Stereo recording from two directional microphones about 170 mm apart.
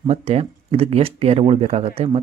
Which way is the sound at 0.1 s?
35° right (ahead or behind).